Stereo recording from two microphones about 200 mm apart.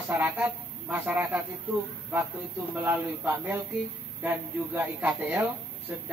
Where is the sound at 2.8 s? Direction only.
10° right (ahead or behind).